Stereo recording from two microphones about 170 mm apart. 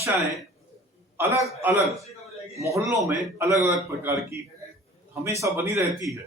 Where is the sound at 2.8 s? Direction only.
15° right (ahead or behind).